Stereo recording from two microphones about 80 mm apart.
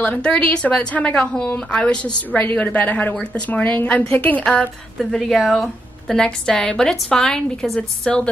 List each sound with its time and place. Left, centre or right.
0.0 s a woman's voice: centre
4.9 s a woman's voice: centre